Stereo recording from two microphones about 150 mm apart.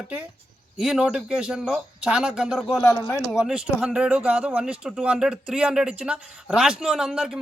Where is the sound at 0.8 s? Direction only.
5° right (ahead or behind).